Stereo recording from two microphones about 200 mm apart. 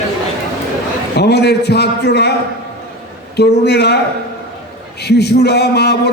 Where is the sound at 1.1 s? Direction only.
55° left (ahead or behind).